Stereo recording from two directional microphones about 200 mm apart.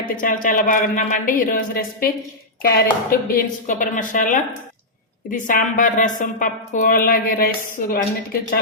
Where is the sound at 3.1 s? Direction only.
40° left (ahead or behind).